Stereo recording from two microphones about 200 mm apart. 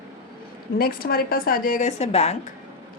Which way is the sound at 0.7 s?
50° left (ahead or behind).